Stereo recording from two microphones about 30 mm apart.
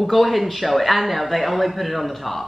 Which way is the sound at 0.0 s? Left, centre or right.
Centre.